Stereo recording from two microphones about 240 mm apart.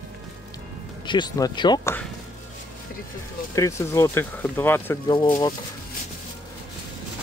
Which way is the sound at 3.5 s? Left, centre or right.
Centre.